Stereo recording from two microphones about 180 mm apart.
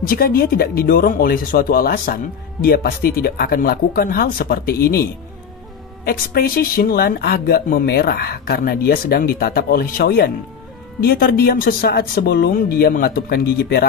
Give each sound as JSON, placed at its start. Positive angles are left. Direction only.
{"t": 0.1, "sound": "speech", "side_deg": 55}
{"t": 6.0, "sound": "speech", "side_deg": 55}